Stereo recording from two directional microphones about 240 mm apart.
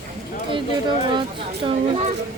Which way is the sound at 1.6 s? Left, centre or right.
Centre.